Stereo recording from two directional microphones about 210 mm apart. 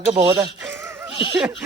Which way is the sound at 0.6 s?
10° right (ahead or behind).